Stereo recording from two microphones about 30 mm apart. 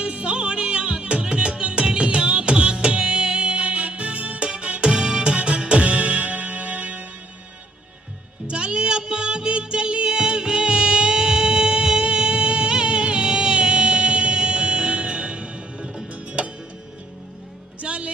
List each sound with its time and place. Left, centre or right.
0.0 s music: right
8.4 s music: right
17.7 s music: right